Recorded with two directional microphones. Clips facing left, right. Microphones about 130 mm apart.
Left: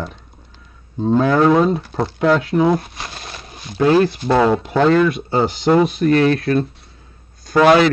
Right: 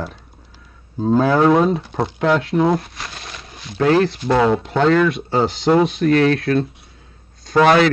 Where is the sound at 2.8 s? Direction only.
25° left (ahead or behind).